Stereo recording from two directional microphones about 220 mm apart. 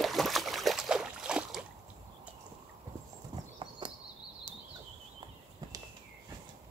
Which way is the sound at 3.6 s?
20° right (ahead or behind).